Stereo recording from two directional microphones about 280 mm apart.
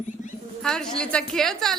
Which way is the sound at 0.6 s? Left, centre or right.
Centre.